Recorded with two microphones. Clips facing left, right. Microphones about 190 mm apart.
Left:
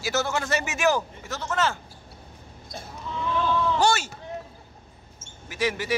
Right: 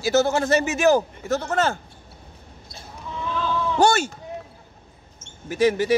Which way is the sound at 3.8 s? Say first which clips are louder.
Right 8 dB; 55° right (ahead or behind).